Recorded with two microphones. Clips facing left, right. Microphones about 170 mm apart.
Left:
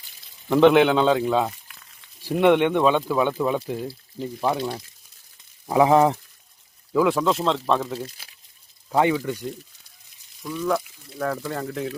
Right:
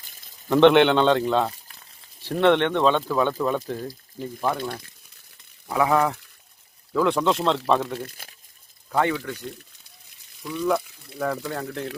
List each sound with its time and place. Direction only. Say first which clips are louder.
0.4 s speech: even; 5° left (ahead or behind); by 6.1 s 25° left (ahead or behind)
6.9 s speech: left 1 dB; 5° left (ahead or behind)
7.9 s speech: left 1 dB; 50° right (ahead or behind)
8.9 s speech: left 3 dB; 15° left (ahead or behind)
10.7 s speech: right 1 dB; centre (ahead or behind)